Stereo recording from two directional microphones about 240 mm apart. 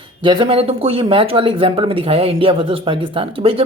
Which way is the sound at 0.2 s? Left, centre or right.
Right.